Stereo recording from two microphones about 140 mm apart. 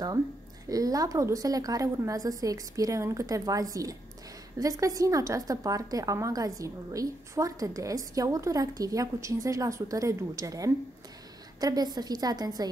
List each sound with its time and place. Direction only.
0.7 s a woman's voice: 25° right (ahead or behind)